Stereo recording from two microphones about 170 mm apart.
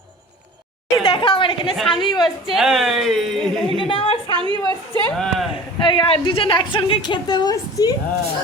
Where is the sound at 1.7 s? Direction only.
5° left (ahead or behind).